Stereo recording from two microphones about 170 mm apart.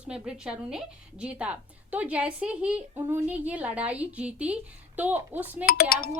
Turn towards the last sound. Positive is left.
turn(degrees=60)  # may be behind; listen again after turning